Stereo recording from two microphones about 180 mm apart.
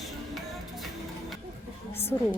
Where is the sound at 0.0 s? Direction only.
Centre (ahead or behind).